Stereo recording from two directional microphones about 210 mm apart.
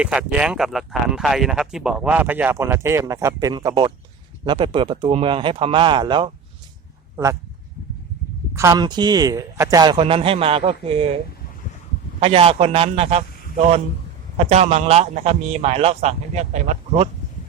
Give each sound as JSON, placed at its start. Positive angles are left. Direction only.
{"t": 0.0, "sound": "a man's voice", "side_deg": -5}
{"t": 8.5, "sound": "a man's voice", "side_deg": -15}
{"t": 12.2, "sound": "a man's voice", "side_deg": -25}
{"t": 14.3, "sound": "a man's voice", "side_deg": -30}